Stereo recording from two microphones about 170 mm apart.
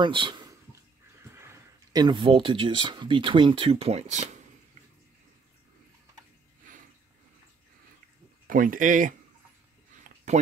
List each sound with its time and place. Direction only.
0.0 s a man's voice: 30° right (ahead or behind)
1.3 s speech: 15° right (ahead or behind); by 4.3 s 40° right (ahead or behind)
8.5 s speech: 55° right (ahead or behind)
10.0 s a sound: 45° right (ahead or behind)